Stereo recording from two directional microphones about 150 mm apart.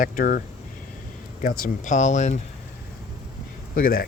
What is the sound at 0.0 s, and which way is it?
Speech, 70° left (ahead or behind).